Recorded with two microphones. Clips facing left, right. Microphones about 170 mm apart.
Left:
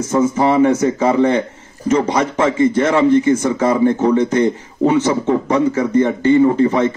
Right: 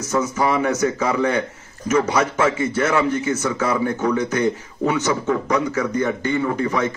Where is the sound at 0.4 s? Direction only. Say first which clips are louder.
Left 6 dB; 30° left (ahead or behind).